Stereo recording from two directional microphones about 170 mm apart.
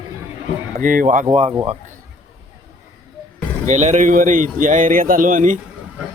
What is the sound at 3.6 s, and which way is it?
Speech, 45° right (ahead or behind).